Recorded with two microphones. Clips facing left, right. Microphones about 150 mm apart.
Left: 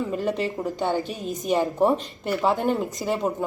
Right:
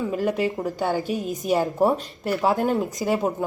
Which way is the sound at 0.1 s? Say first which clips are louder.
Right 2 dB; 5° right (ahead or behind).